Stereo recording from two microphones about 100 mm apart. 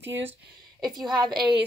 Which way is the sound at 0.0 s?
20° right (ahead or behind).